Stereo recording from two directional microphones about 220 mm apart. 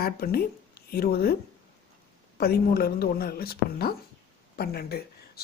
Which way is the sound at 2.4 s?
45° left (ahead or behind).